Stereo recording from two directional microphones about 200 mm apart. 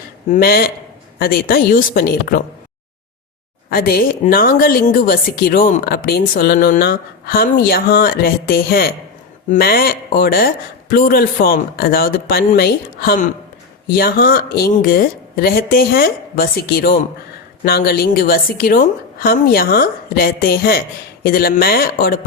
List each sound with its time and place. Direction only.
0.3 s a woman's voice: 50° left (ahead or behind)
3.7 s a woman's voice: 50° left (ahead or behind)